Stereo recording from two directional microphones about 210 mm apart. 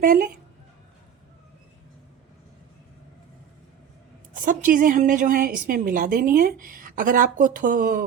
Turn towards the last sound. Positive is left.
turn(degrees=-40)  # may be behind; listen again after turning